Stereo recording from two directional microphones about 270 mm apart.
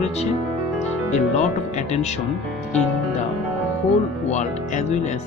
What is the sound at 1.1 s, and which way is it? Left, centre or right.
Speech, left.